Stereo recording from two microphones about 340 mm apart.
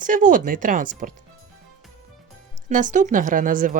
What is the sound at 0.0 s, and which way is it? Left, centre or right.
A woman's voice, right.